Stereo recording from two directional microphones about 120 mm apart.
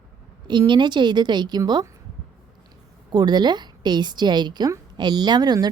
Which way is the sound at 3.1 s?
35° right (ahead or behind).